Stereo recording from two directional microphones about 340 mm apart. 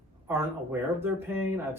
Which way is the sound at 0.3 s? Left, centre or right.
Centre.